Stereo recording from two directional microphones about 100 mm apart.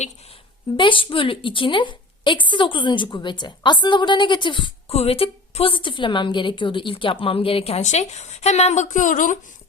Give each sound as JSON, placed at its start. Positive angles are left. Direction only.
{"t": 0.8, "sound": "a woman's voice", "side_deg": 55}
{"t": 4.9, "sound": "a woman's voice", "side_deg": 85}